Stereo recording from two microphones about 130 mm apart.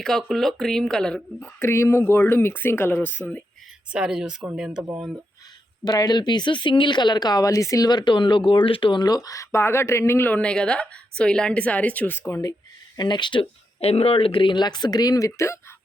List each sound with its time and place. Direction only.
0.0 s speech: centre (ahead or behind)
1.5 s speech: 20° left (ahead or behind)
3.9 s speech: 5° right (ahead or behind)
5.8 s speech: 30° left (ahead or behind); by 12.2 s 15° left (ahead or behind)
12.3 s speech: 25° left (ahead or behind)
13.0 s speech: 35° left (ahead or behind)